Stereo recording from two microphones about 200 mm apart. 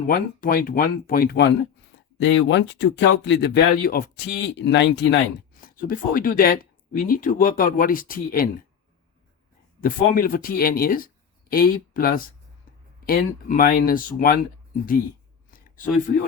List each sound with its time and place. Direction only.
0.1 s speech: 45° left (ahead or behind)
2.2 s speech: 65° left (ahead or behind)
5.5 s speech: 45° left (ahead or behind)
9.8 s speech: 45° left (ahead or behind)
15.4 s a sound: 45° left (ahead or behind)